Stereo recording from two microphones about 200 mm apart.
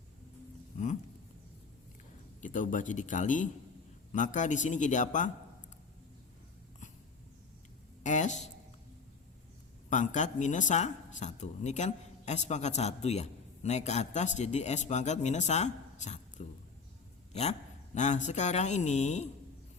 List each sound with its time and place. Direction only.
0.7 s a sound: 40° left (ahead or behind)
2.4 s speech: 40° left (ahead or behind)
8.0 s speech: 35° left (ahead or behind)
9.9 s speech: 35° left (ahead or behind)